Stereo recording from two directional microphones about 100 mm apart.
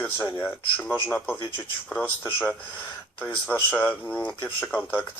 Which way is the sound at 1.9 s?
15° left (ahead or behind).